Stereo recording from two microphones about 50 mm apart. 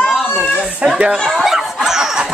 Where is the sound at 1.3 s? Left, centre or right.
Centre.